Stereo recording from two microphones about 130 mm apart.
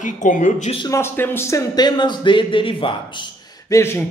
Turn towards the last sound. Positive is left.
turn(degrees=20)  # may be behind; listen again after turning